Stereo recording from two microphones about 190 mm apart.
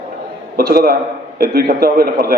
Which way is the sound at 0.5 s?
55° right (ahead or behind).